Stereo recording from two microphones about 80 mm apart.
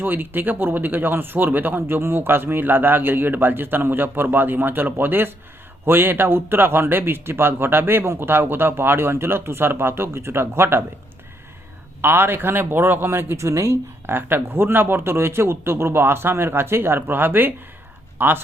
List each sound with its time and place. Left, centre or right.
0.0 s speech: right
12.0 s speech: right